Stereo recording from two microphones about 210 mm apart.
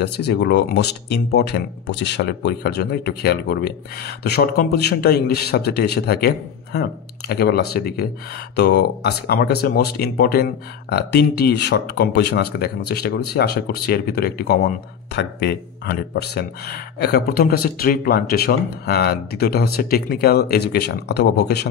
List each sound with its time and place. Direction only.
0.0 s speech: 50° left (ahead or behind)